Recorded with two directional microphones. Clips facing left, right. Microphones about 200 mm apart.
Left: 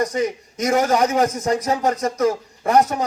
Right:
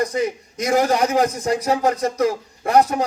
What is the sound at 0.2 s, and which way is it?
A man's voice, 35° right (ahead or behind).